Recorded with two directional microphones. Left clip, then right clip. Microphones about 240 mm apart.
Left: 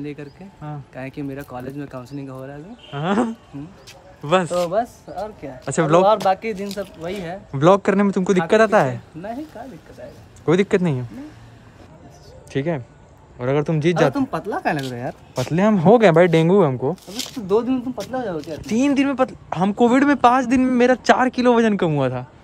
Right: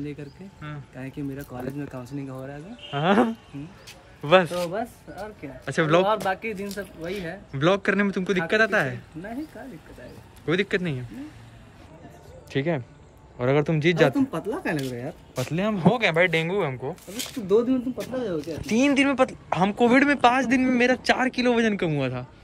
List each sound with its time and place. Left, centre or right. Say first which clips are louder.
0.0 s speech: left 4 dB; centre
6.0 s speech: left 8 dB; left
10.4 s speech: left 7 dB; centre
12.4 s speech: left 3 dB; centre
15.4 s speech: left 8 dB; left
16.2 s speech: left 8 dB; centre
18.1 s speech: left 3 dB; left